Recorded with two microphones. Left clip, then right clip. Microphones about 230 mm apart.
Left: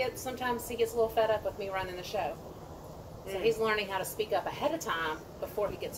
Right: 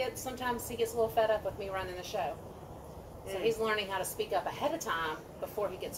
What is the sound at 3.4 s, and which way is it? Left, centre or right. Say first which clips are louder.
A woman's voice: left 2 dB; centre.